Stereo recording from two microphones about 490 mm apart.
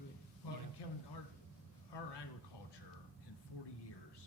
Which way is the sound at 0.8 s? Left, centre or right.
Left.